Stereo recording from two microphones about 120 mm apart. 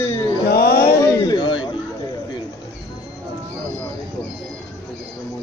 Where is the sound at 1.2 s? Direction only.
40° left (ahead or behind).